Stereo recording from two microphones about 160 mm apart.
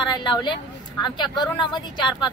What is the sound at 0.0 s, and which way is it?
A woman's voice, 30° left (ahead or behind).